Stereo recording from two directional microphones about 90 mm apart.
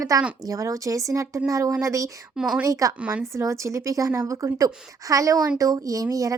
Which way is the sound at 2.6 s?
40° right (ahead or behind).